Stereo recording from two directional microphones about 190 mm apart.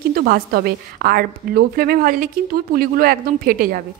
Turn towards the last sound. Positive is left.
turn(degrees=-50)  # may be behind; listen again after turning